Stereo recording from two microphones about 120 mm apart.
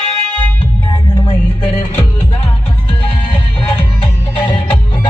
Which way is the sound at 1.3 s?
45° left (ahead or behind).